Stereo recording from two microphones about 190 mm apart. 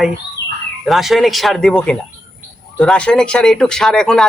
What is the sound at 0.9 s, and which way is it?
Speech, centre (ahead or behind).